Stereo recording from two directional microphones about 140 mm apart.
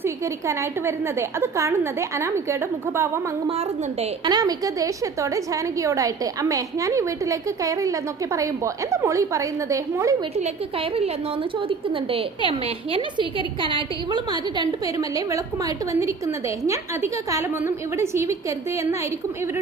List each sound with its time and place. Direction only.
0.0 s a woman's voice: 20° right (ahead or behind)
4.3 s a woman's voice: 30° right (ahead or behind)
11.7 s a woman's voice: 40° right (ahead or behind)
14.6 s a woman's voice: 25° right (ahead or behind)